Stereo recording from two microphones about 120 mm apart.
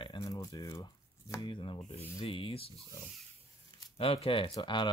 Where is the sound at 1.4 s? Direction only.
45° left (ahead or behind).